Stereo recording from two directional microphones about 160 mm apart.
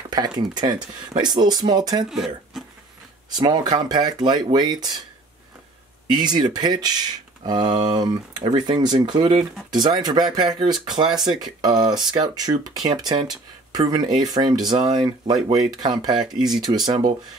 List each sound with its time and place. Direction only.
0.1 s speech: 25° right (ahead or behind)
2.0 s speech: centre (ahead or behind)
3.3 s speech: 25° right (ahead or behind)
6.1 s speech: 25° right (ahead or behind)
16.3 s speech: centre (ahead or behind)
16.7 s speech: 25° right (ahead or behind)